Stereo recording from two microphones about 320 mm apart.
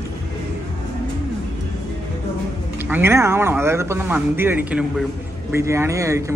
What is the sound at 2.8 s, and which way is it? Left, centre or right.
A man's voice, centre.